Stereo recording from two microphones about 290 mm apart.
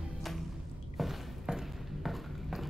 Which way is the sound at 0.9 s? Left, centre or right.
Centre.